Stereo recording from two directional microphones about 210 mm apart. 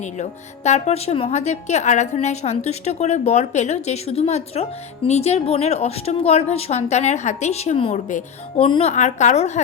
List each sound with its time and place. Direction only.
0.2 s speech: 30° left (ahead or behind)